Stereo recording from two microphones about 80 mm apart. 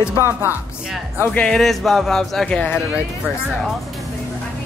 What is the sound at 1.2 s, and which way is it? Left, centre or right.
Speech, left.